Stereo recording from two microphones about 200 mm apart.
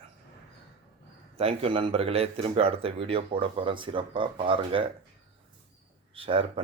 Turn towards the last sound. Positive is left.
turn(degrees=-25)  # may be behind; listen again after turning